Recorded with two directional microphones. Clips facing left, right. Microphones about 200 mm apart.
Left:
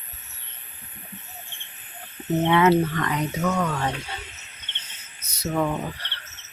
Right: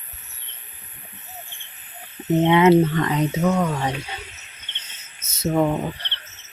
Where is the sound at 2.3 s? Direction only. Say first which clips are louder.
Right 4 dB; 20° right (ahead or behind).